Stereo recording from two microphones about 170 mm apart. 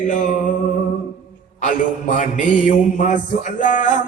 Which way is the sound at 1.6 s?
45° left (ahead or behind).